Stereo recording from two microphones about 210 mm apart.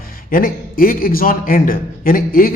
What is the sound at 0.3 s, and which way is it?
A man's voice, 40° left (ahead or behind).